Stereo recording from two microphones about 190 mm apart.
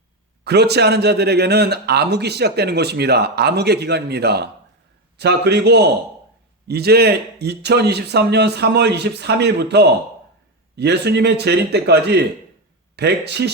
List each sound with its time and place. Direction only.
0.4 s a man's voice: 60° right (ahead or behind)